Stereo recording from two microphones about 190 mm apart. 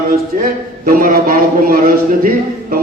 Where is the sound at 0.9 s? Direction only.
50° right (ahead or behind).